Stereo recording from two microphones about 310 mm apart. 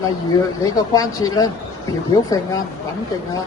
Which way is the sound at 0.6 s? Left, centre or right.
Centre.